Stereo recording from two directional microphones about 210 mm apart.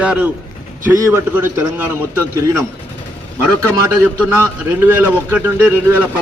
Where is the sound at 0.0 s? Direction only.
5° right (ahead or behind).